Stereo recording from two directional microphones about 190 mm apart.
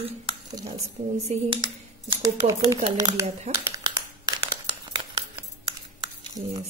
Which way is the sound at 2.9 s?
15° right (ahead or behind).